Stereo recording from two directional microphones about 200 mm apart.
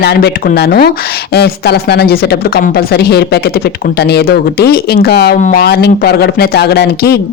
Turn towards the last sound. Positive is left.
turn(degrees=55)  # may be behind; listen again after turning